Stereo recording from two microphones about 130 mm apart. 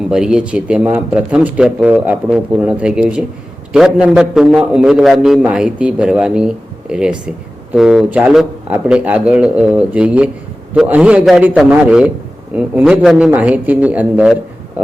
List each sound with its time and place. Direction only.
0.1 s a man's voice: 5° right (ahead or behind)